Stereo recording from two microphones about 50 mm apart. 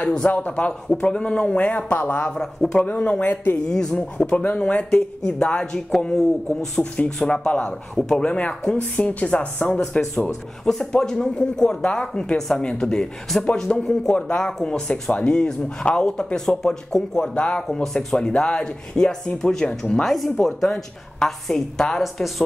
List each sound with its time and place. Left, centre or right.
0.0 s speech: left
2.4 s speech: centre
2.8 s speech: left
3.6 s speech: centre
4.3 s speech: left
5.4 s speech: centre
7.4 s speech: left
9.8 s speech: centre
17.3 s speech: left
17.8 s speech: centre
18.3 s speech: centre
20.0 s speech: centre